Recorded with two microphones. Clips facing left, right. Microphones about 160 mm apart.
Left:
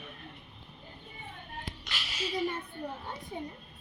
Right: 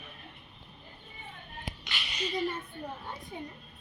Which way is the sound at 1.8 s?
Centre (ahead or behind).